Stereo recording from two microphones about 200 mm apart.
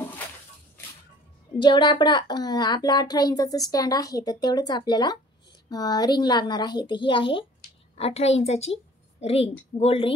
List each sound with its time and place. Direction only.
1.6 s a woman's voice: 25° left (ahead or behind)